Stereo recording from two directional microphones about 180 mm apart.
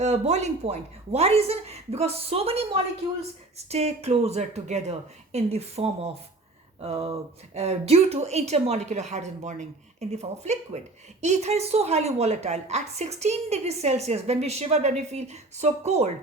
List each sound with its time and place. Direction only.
0.0 s speech: 40° right (ahead or behind)
3.7 s speech: 35° right (ahead or behind)